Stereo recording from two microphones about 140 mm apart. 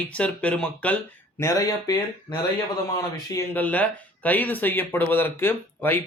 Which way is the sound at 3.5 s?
10° left (ahead or behind).